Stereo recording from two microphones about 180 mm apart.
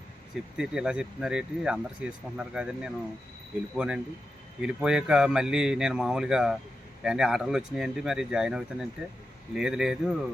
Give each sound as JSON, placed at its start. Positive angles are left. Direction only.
{"t": 0.5, "sound": "speech", "side_deg": -5}